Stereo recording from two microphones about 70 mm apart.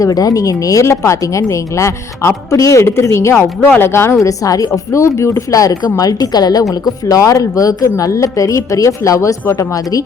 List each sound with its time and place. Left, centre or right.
0.0 s speech: left